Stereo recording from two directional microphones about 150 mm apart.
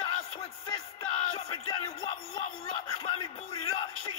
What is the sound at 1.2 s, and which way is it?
Music, 35° left (ahead or behind).